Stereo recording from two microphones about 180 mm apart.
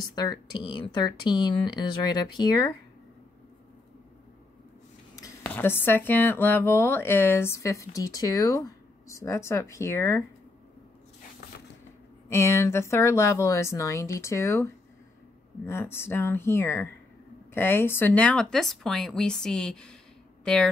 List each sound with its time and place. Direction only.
0.0 s speech: 25° left (ahead or behind)
5.4 s speech: 10° left (ahead or behind)
12.3 s speech: 15° left (ahead or behind)